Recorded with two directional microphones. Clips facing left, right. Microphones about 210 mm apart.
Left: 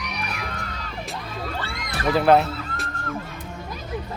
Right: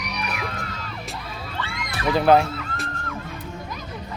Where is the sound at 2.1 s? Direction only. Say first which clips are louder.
Even; centre (ahead or behind).